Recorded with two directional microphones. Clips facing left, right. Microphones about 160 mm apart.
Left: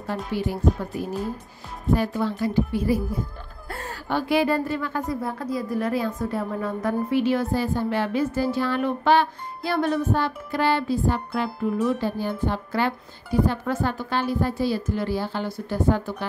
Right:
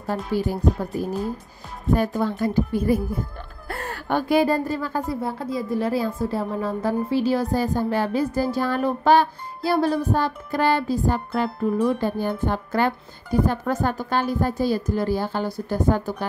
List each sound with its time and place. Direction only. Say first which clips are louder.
0.0 s a woman's voice: right 3 dB; 40° right (ahead or behind)
2.0 s music: right 3 dB; 45° right (ahead or behind)
3.6 s whimper: right 3 dB; 65° right (ahead or behind)
4.3 s a woman's voice: right 2 dB; 40° right (ahead or behind)
8.4 s music: right 1 dB; 40° right (ahead or behind)